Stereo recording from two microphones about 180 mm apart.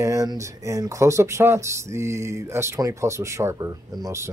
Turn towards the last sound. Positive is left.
turn(degrees=-15)  # may be behind; listen again after turning